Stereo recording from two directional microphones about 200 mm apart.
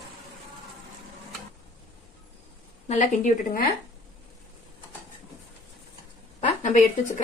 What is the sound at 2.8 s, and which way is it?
Speech, 35° left (ahead or behind).